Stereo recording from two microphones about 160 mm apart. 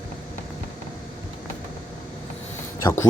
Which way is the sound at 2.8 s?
15° left (ahead or behind).